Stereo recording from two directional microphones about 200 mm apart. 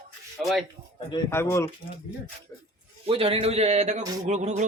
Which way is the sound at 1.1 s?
15° left (ahead or behind).